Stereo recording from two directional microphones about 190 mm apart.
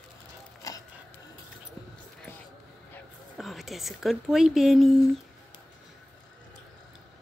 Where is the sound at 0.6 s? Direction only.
20° left (ahead or behind).